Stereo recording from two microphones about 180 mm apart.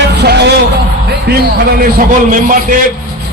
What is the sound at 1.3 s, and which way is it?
A man's voice, 55° right (ahead or behind).